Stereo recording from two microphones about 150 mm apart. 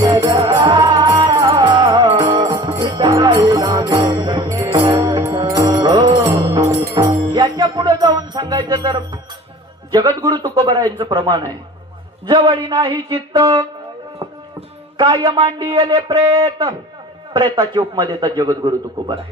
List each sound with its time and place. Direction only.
0.0 s music: 20° right (ahead or behind)
10.2 s a man's voice: 20° right (ahead or behind)
10.9 s a sound: 30° right (ahead or behind)
13.1 s a man's voice: 25° right (ahead or behind)
14.2 s a sound: 35° right (ahead or behind)
17.3 s a man's voice: 25° right (ahead or behind)